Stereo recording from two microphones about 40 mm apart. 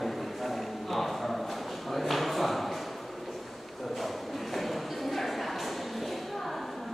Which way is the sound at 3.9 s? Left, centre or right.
Centre.